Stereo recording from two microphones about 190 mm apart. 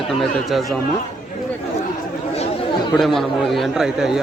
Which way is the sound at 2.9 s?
Centre (ahead or behind).